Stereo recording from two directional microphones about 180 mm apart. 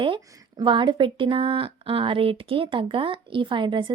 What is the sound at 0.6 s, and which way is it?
Speech, 25° right (ahead or behind).